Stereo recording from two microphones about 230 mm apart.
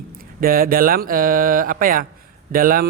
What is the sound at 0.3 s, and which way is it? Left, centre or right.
Speech, right.